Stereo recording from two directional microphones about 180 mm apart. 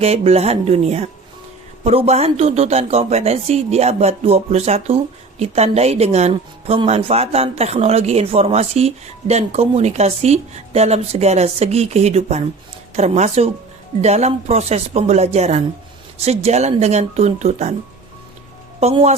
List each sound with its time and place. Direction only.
0.0 s a woman's voice: 35° right (ahead or behind)
18.8 s a woman's voice: 35° right (ahead or behind)